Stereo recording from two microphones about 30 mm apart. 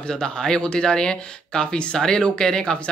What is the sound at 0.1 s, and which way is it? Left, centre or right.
Speech, left.